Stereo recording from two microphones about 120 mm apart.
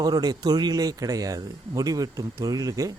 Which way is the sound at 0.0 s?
35° right (ahead or behind).